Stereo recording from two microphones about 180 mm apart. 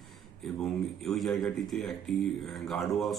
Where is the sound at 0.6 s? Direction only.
Centre (ahead or behind).